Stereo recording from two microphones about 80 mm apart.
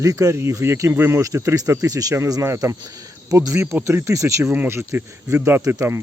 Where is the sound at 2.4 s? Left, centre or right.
Right.